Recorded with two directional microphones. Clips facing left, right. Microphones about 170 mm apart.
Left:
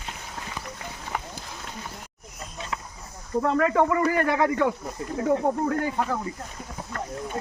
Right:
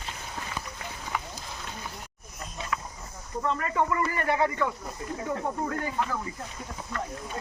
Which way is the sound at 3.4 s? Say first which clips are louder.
Left 6 dB; 70° left (ahead or behind).